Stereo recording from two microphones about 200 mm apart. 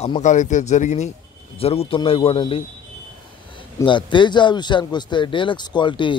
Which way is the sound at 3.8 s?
25° left (ahead or behind).